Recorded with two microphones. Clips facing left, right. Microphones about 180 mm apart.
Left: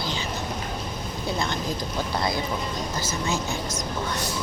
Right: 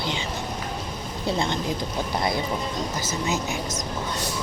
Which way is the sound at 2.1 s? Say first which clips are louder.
Right 2 dB; 20° right (ahead or behind).